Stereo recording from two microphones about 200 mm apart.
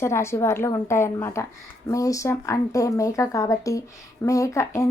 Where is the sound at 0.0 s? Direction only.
15° left (ahead or behind).